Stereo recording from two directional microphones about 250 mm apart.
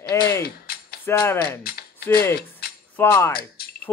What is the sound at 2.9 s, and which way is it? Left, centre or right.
Speech, centre.